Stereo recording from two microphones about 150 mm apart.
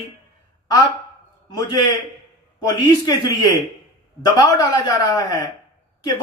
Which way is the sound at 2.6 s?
25° left (ahead or behind).